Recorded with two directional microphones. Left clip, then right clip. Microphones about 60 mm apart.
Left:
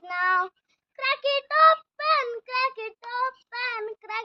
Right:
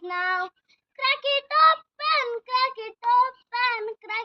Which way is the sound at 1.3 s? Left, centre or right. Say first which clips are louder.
Right 1 dB; left.